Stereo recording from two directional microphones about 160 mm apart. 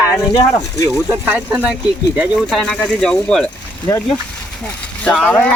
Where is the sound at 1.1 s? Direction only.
10° right (ahead or behind); by 3.5 s 5° left (ahead or behind).